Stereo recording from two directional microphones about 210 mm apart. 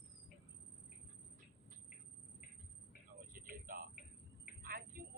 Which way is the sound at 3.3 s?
40° right (ahead or behind).